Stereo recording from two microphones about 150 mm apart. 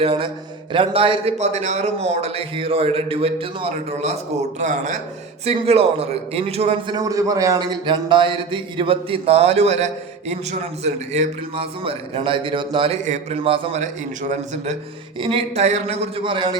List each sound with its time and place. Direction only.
0.0 s a man's voice: 35° right (ahead or behind)
5.5 s a man's voice: 40° right (ahead or behind)
15.2 s a man's voice: 35° right (ahead or behind)